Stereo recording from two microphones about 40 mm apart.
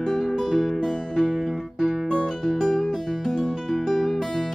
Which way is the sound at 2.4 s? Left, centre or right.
Centre.